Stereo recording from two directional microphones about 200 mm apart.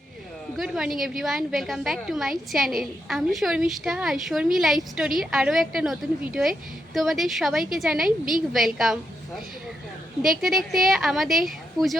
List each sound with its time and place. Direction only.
0.5 s a woman's voice: centre (ahead or behind)